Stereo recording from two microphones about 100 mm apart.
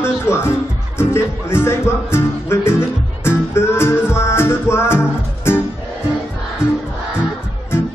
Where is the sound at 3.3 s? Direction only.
25° left (ahead or behind).